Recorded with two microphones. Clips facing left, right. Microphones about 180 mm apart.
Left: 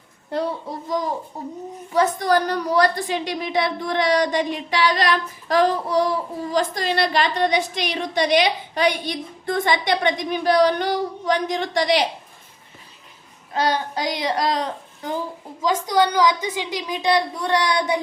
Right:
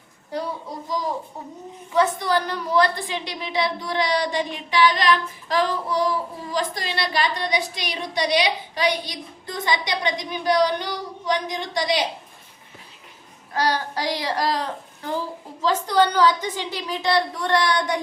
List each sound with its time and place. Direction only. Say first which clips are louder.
0.9 s a woman's voice: left 2 dB; 55° left (ahead or behind)
1.9 s a woman's voice: left 2 dB; 45° left (ahead or behind)
13.5 s a child's voice: left 2 dB; 25° left (ahead or behind)